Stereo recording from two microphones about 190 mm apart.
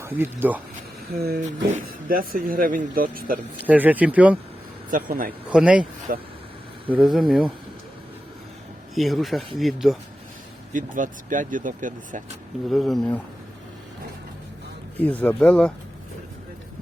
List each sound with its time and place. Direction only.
0.0 s speech: 10° right (ahead or behind)
1.2 s speech: 45° right (ahead or behind)
3.6 s speech: 10° right (ahead or behind)
4.9 s speech: 45° right (ahead or behind)
5.5 s speech: 5° right (ahead or behind)
6.1 s speech: 50° right (ahead or behind)
6.9 s speech: centre (ahead or behind)
9.0 s speech: centre (ahead or behind)
10.7 s speech: 45° right (ahead or behind)
12.6 s speech: centre (ahead or behind)
15.0 s speech: 10° left (ahead or behind)